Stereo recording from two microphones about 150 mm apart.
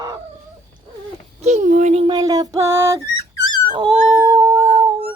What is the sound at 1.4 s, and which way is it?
Speech, 50° right (ahead or behind).